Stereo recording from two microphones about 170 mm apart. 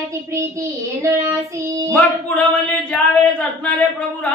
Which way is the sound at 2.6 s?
5° left (ahead or behind).